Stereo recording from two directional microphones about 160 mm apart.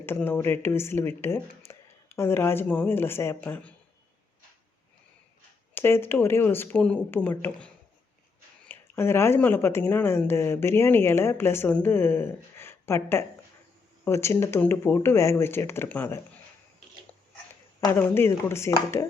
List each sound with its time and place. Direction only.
0.0 s speech: 15° left (ahead or behind)
5.7 s speech: 15° left (ahead or behind)
8.7 s speech: 15° left (ahead or behind)
17.9 s speech: 15° left (ahead or behind)